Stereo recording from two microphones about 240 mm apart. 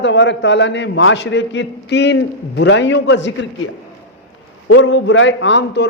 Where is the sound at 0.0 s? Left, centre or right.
Left.